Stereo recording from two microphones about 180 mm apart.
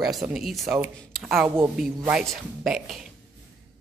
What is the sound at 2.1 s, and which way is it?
Speech, 5° right (ahead or behind).